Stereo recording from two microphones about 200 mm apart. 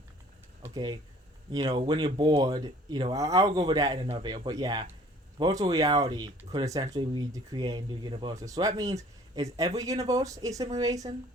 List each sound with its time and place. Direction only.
0.6 s speech: 20° right (ahead or behind)